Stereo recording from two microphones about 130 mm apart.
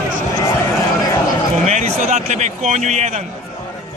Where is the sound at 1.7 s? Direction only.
60° right (ahead or behind).